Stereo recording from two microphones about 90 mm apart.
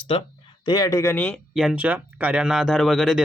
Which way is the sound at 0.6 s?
50° left (ahead or behind).